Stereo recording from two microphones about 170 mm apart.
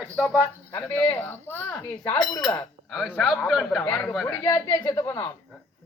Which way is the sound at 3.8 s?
10° left (ahead or behind).